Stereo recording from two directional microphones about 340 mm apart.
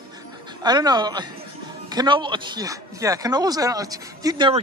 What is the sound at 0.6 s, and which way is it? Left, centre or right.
Speech, centre.